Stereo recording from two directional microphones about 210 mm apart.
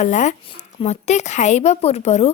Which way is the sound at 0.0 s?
35° left (ahead or behind).